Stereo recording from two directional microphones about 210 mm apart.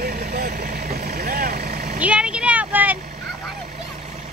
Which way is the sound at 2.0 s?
5° right (ahead or behind).